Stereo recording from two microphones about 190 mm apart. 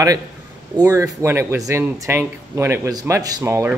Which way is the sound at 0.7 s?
15° right (ahead or behind).